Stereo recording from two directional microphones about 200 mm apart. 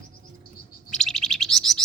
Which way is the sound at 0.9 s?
Centre (ahead or behind).